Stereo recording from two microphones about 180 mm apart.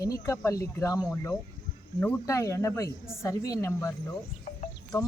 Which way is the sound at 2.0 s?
15° left (ahead or behind).